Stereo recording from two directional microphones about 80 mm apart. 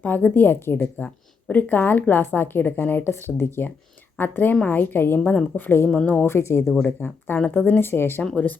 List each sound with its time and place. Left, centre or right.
0.0 s a woman's voice: left
7.0 s a woman's voice: left
8.2 s speech: centre